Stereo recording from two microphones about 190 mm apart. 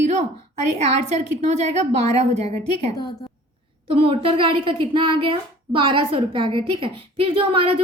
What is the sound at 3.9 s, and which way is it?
A woman's voice, 30° right (ahead or behind).